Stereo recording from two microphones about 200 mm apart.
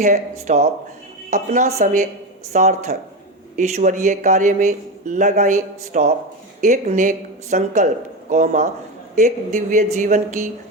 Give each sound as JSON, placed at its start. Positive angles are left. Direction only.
{"t": 0.0, "sound": "speech", "side_deg": -40}